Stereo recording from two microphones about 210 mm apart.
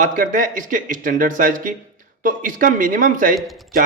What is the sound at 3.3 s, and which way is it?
Speech, centre (ahead or behind).